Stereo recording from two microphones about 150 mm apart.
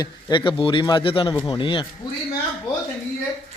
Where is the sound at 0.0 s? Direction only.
30° left (ahead or behind).